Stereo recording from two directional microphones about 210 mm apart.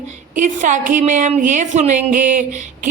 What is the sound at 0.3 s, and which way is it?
A woman's voice, 35° right (ahead or behind).